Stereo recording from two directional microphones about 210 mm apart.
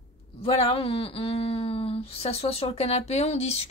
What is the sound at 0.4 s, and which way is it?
Speech, 25° left (ahead or behind).